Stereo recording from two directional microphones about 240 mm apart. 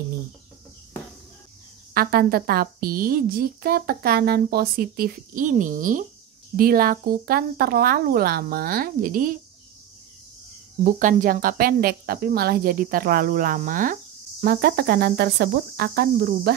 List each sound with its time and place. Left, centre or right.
2.0 s a woman's voice: right
10.8 s a woman's voice: right